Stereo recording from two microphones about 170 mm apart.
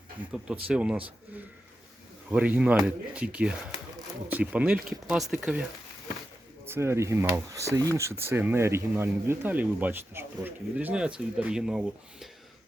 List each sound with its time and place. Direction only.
0.3 s speech: 5° right (ahead or behind)
2.3 s speech: 5° right (ahead or behind)
6.7 s speech: 15° right (ahead or behind)